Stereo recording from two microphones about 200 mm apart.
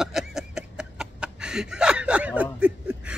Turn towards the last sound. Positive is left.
turn(degrees=-5)  # may be behind; listen again after turning